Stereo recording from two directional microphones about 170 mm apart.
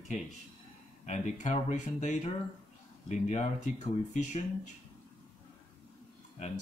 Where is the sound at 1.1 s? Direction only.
45° left (ahead or behind).